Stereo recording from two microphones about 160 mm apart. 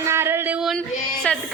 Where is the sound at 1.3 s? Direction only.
5° left (ahead or behind).